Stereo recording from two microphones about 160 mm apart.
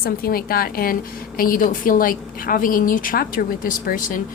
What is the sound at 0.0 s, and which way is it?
A woman's voice, 70° left (ahead or behind).